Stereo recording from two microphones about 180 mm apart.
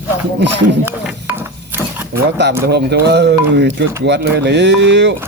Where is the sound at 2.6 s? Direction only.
65° right (ahead or behind).